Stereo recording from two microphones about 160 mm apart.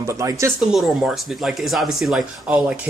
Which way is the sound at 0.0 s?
20° right (ahead or behind).